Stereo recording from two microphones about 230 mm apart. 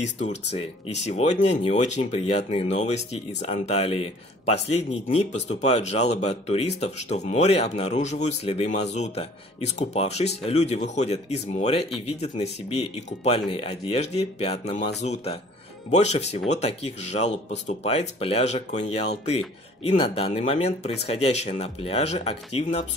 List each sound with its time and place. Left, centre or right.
0.0 s speech: left